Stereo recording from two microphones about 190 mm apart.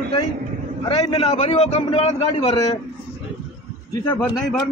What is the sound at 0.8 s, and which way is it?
A man's voice, 30° left (ahead or behind).